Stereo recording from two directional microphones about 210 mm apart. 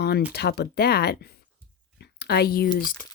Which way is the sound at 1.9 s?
50° left (ahead or behind).